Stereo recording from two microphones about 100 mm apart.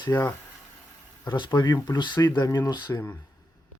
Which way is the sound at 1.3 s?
50° left (ahead or behind).